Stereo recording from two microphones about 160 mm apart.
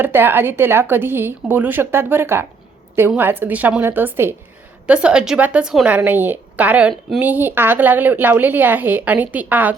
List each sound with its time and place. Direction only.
0.0 s speech: 15° right (ahead or behind)